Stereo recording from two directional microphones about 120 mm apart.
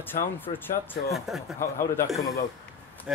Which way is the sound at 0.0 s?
15° left (ahead or behind).